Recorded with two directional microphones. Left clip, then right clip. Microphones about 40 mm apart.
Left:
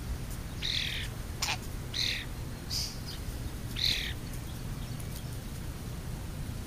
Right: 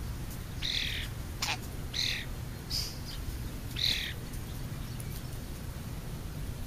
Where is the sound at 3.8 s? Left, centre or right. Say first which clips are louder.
Even; right.